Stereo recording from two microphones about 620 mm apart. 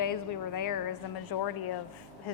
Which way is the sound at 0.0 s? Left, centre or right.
Left.